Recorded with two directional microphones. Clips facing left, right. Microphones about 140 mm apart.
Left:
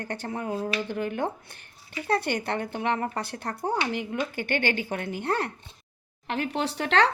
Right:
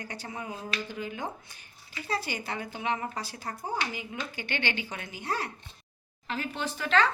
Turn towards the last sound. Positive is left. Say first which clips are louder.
# left 3 dB
turn(degrees=70)  # may be behind; listen again after turning